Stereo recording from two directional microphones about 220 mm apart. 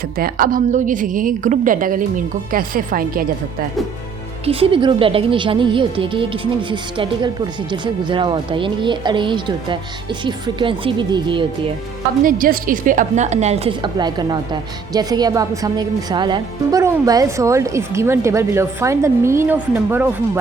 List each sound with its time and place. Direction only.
0.2 s a woman's voice: 40° right (ahead or behind)
4.4 s a woman's voice: 25° right (ahead or behind)
12.2 s a woman's voice: 40° right (ahead or behind); by 20.4 s 10° right (ahead or behind)